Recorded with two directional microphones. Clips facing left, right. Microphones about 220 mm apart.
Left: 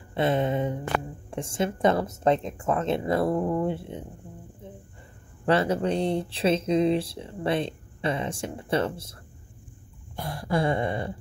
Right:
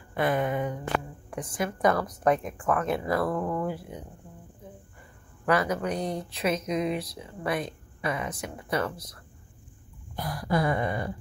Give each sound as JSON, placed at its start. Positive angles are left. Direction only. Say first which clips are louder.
{"t": 0.1, "sound": "speech", "louder": "left 2 dB", "side_deg": 25}
{"t": 5.4, "sound": "speech", "louder": "left 3 dB", "side_deg": 30}
{"t": 10.1, "sound": "a sound", "louder": "even", "side_deg": 25}